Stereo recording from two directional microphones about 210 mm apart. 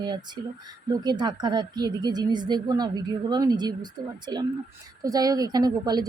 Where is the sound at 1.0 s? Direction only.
20° right (ahead or behind).